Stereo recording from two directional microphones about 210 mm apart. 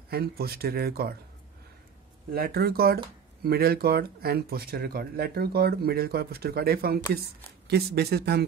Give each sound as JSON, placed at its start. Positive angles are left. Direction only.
{"t": 0.1, "sound": "speech", "side_deg": -45}
{"t": 2.3, "sound": "speech", "side_deg": -45}